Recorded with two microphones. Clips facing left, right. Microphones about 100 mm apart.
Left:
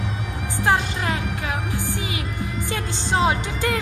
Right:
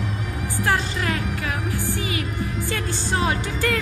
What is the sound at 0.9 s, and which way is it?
Music, 20° left (ahead or behind).